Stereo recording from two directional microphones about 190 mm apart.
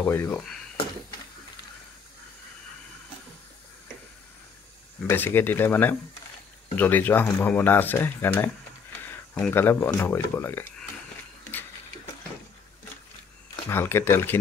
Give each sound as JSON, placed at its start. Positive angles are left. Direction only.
{"t": 0.0, "sound": "speech", "side_deg": 10}
{"t": 5.0, "sound": "speech", "side_deg": 10}
{"t": 13.7, "sound": "speech", "side_deg": 15}